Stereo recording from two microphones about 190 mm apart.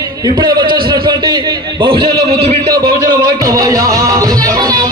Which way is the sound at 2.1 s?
60° right (ahead or behind).